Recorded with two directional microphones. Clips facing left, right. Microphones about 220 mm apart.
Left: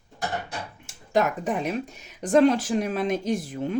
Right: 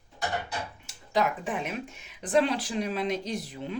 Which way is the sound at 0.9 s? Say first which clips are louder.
Left 4 dB; 45° left (ahead or behind).